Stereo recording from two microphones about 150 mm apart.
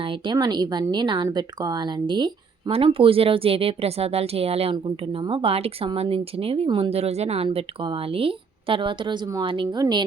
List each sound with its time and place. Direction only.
0.0 s speech: 35° right (ahead or behind)
7.4 s speech: 35° right (ahead or behind)